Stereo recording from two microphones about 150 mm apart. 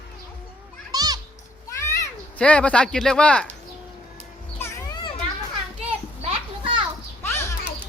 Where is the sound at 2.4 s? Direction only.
10° left (ahead or behind).